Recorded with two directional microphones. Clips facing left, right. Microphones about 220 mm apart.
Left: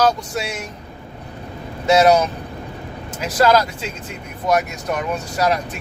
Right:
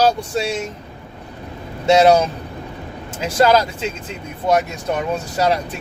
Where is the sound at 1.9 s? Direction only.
30° right (ahead or behind).